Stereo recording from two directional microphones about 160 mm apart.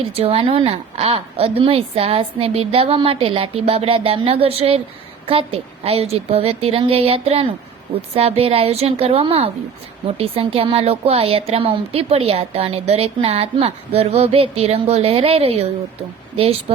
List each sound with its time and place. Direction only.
0.0 s speech: 35° right (ahead or behind)